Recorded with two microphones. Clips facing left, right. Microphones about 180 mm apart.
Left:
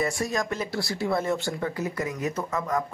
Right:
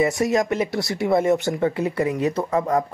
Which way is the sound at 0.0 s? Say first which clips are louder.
Right 7 dB; 20° right (ahead or behind).